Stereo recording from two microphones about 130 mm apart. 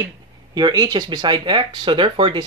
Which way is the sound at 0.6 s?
30° right (ahead or behind).